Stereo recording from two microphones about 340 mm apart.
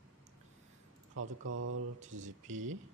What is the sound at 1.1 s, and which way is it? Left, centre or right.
Speech, right.